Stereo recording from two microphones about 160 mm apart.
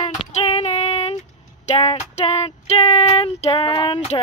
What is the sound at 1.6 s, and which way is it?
Speech, 40° left (ahead or behind).